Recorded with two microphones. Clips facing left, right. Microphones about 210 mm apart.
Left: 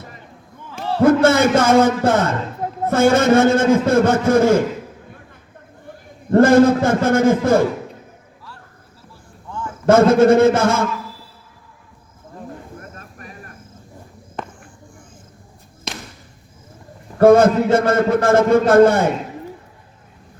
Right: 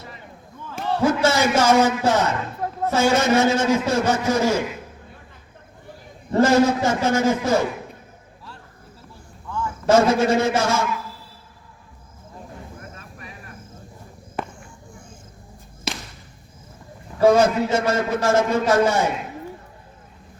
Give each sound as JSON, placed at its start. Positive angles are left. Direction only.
{"t": 1.0, "sound": "a man's voice", "side_deg": 55}
{"t": 6.3, "sound": "a man's voice", "side_deg": 55}
{"t": 9.8, "sound": "a man's voice", "side_deg": 55}
{"t": 13.0, "sound": "cricket", "side_deg": 45}
{"t": 14.4, "sound": "a sound", "side_deg": -10}
{"t": 15.9, "sound": "basketball bounce", "side_deg": -5}
{"t": 17.2, "sound": "a man's voice", "side_deg": 55}